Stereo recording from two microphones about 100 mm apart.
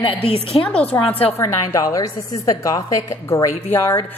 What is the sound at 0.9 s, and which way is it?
A woman's voice, 35° left (ahead or behind).